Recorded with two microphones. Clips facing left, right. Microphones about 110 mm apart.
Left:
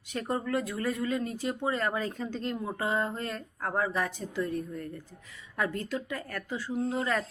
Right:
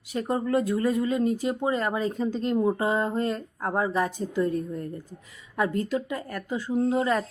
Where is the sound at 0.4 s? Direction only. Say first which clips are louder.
Right 7 dB; 30° right (ahead or behind).